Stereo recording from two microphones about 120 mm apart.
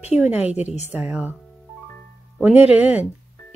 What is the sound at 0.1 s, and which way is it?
Speech, 10° right (ahead or behind).